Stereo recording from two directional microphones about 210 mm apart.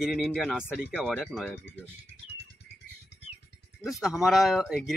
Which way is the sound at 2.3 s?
55° left (ahead or behind).